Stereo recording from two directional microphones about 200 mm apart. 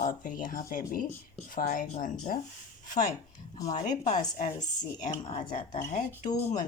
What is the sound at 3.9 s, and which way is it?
Speech, 35° left (ahead or behind).